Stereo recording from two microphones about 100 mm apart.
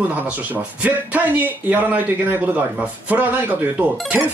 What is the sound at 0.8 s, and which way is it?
Speech, 15° right (ahead or behind).